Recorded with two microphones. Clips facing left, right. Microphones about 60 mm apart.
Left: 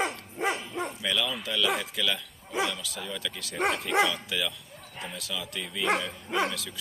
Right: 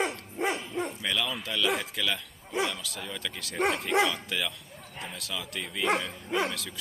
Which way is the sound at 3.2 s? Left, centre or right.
Right.